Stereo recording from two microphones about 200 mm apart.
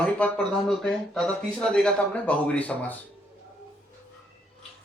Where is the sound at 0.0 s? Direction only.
5° left (ahead or behind).